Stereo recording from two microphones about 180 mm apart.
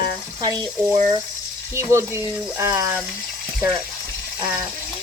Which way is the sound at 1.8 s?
15° right (ahead or behind).